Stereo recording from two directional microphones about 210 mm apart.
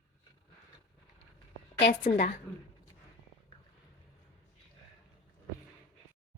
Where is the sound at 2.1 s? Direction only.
35° left (ahead or behind).